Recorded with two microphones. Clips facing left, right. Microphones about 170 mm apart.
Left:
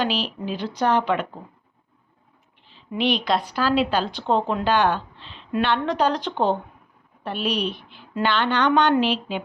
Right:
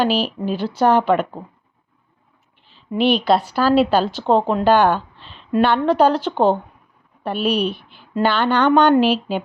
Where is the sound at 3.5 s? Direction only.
40° right (ahead or behind).